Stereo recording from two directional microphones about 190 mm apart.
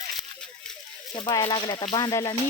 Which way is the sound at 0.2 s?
5° left (ahead or behind).